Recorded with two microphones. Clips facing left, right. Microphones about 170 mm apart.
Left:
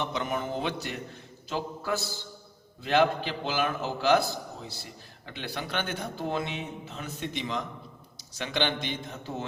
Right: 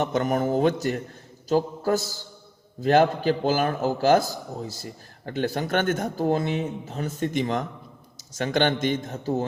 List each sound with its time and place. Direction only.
0.0 s a man's voice: 45° right (ahead or behind)